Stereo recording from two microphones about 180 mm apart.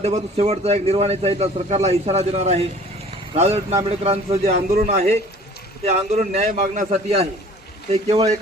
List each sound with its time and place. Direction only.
0.0 s speech: 35° right (ahead or behind)